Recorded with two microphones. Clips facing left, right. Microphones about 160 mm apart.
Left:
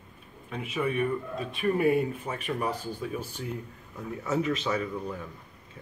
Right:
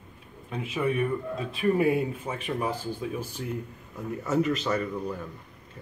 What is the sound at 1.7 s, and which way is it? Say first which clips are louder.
Speech: left 2 dB; 20° right (ahead or behind).